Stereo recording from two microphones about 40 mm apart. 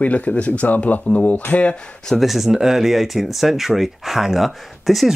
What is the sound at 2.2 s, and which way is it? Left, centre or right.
Speech, centre.